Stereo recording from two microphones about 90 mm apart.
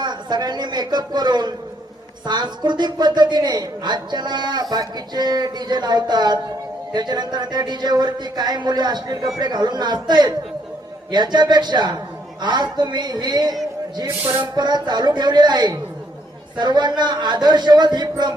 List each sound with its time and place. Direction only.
0.0 s a man's voice: 55° right (ahead or behind)